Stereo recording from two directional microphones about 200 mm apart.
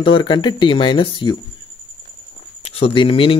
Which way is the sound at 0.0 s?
25° left (ahead or behind).